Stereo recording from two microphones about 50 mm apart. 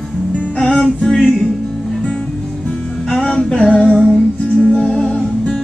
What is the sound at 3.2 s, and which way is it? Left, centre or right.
Music, centre.